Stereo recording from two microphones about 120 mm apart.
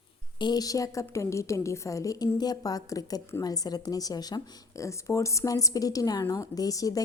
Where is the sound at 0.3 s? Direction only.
35° left (ahead or behind).